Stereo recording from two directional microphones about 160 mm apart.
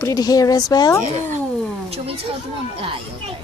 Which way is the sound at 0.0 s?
20° left (ahead or behind).